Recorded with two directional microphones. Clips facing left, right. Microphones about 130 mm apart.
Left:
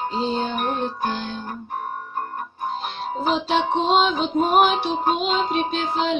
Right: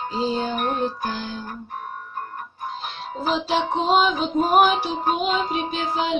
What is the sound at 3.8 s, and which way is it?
Music, 10° right (ahead or behind).